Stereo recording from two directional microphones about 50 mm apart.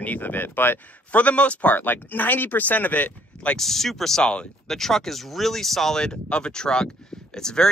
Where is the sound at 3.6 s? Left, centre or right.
Centre.